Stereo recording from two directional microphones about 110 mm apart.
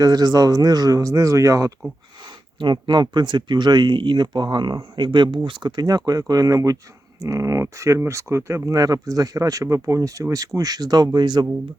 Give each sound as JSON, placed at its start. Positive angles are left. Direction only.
{"t": 0.0, "sound": "speech", "side_deg": -35}
{"t": 2.6, "sound": "speech", "side_deg": -45}